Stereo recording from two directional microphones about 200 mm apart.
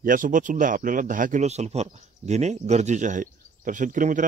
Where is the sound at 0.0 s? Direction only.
40° right (ahead or behind).